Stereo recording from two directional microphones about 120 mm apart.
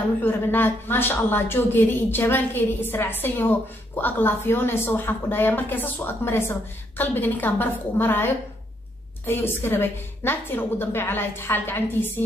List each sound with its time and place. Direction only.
0.2 s a woman's voice: 15° left (ahead or behind)